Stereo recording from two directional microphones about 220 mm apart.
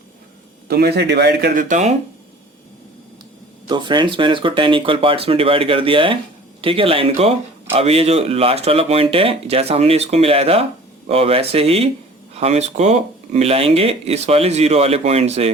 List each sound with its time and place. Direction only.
0.7 s speech: 45° right (ahead or behind)
3.7 s speech: 20° right (ahead or behind)